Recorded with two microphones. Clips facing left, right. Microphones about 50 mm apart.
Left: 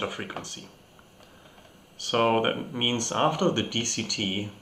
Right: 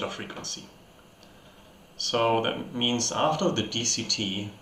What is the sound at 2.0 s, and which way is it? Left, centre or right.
Speech, centre.